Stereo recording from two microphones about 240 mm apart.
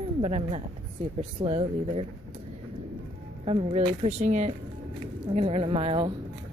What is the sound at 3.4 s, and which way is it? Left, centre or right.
Speech, right.